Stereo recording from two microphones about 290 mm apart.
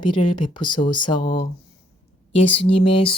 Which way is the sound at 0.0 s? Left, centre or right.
Centre.